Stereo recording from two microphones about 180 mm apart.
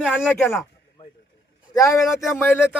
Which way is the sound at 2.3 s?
10° left (ahead or behind).